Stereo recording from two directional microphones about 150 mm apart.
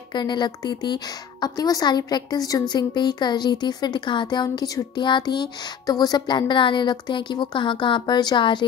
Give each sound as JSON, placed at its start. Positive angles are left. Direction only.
{"t": 0.1, "sound": "speech", "side_deg": 30}